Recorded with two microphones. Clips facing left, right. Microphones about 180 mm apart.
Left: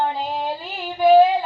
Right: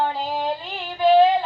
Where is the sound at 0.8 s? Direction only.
10° left (ahead or behind).